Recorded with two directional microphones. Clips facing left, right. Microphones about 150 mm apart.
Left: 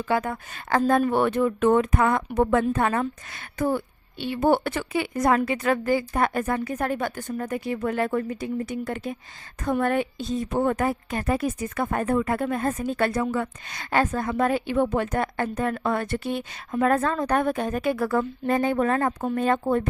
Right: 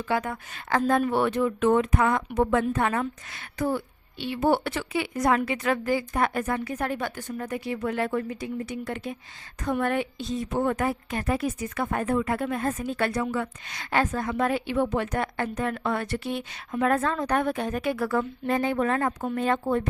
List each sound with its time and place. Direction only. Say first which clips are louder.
0.1 s a woman's voice: left 2 dB; 40° left (ahead or behind)